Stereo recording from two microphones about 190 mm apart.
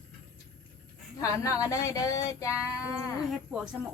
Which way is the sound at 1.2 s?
15° left (ahead or behind).